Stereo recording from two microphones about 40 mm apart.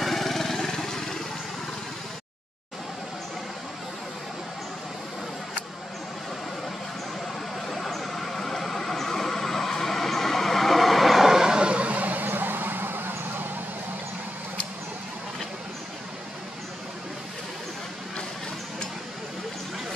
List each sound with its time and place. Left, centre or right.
0.0 s lawn mower: centre
7.6 s vehicle: centre
11.7 s vehicle: right